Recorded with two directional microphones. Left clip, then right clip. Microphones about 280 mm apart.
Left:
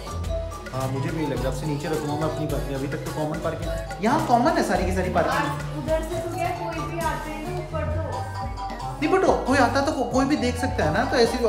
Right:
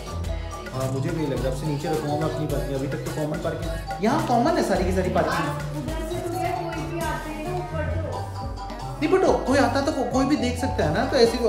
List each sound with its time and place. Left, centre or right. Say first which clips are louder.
0.7 s speech: even; centre
4.0 s speech: left 2 dB; centre
9.0 s speech: even; centre